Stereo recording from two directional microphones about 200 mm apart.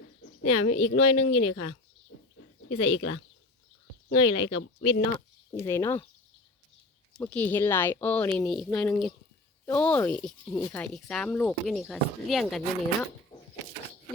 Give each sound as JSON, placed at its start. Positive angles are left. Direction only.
{"t": 0.4, "sound": "a woman's voice", "side_deg": 90}
{"t": 4.1, "sound": "speech", "side_deg": 25}
{"t": 5.5, "sound": "speech", "side_deg": 10}
{"t": 7.1, "sound": "speech", "side_deg": 5}